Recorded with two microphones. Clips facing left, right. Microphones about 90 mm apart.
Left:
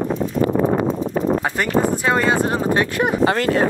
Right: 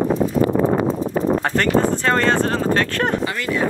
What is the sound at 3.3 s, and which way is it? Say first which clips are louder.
Speech: left 5 dB; 50° left (ahead or behind).